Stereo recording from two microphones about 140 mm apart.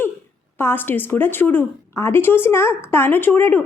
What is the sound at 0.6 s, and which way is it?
A woman's voice, 15° left (ahead or behind).